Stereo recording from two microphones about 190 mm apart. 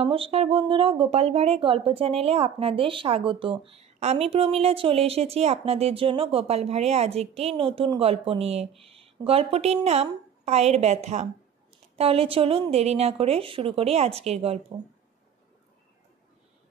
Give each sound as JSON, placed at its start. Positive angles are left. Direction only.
{"t": 0.0, "sound": "a woman's voice", "side_deg": -30}